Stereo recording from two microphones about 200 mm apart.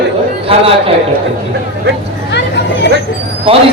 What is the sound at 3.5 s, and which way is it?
Speech, 25° right (ahead or behind).